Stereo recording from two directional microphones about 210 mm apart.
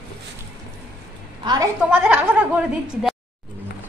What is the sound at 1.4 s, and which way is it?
Speech, 20° right (ahead or behind).